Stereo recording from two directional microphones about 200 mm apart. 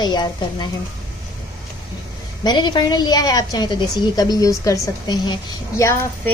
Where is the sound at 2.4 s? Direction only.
20° left (ahead or behind).